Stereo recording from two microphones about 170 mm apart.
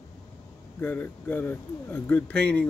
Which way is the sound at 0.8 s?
10° left (ahead or behind).